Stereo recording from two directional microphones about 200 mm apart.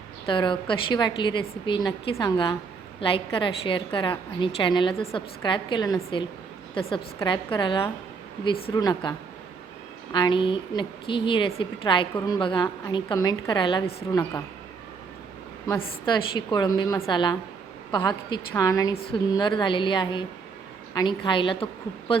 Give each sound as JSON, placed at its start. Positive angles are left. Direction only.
{"t": 0.3, "sound": "a woman's voice", "side_deg": 25}
{"t": 16.5, "sound": "a woman's voice", "side_deg": 20}